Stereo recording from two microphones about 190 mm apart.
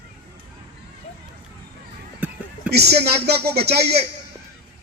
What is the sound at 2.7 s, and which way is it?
A man's voice, 60° right (ahead or behind).